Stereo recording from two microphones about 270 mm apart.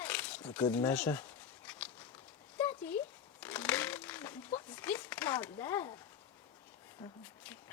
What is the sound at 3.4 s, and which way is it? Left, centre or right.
Crumpling, centre.